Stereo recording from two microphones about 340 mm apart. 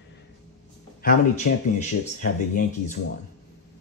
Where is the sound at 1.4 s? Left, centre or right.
Left.